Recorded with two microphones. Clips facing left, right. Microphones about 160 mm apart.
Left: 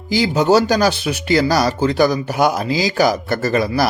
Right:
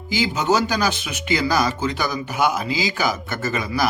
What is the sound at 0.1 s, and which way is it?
A man's voice, 35° left (ahead or behind).